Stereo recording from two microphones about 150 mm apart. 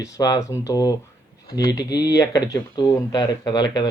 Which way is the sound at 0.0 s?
20° left (ahead or behind).